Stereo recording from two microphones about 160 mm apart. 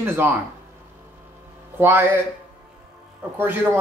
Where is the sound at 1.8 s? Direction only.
15° right (ahead or behind).